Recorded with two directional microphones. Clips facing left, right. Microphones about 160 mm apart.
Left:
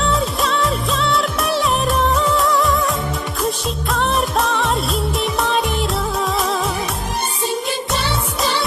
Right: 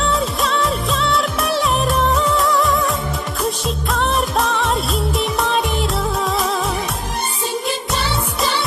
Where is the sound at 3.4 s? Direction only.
Centre (ahead or behind).